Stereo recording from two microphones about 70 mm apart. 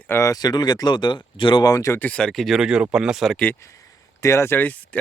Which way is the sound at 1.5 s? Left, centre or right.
Left.